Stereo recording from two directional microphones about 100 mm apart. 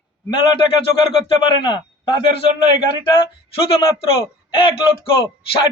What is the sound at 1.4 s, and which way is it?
Speech, 50° left (ahead or behind).